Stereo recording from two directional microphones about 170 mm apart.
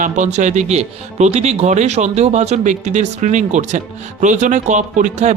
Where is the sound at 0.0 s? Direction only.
45° right (ahead or behind).